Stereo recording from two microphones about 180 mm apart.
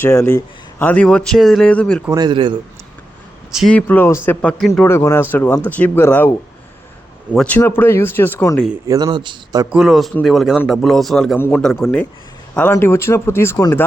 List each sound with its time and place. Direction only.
0.0 s speech: 15° left (ahead or behind)
2.0 s speech: 20° right (ahead or behind)
3.5 s speech: centre (ahead or behind)
7.3 s speech: 10° left (ahead or behind)
8.9 s speech: 20° right (ahead or behind)
9.7 s a man's voice: centre (ahead or behind)
12.7 s speech: 15° left (ahead or behind)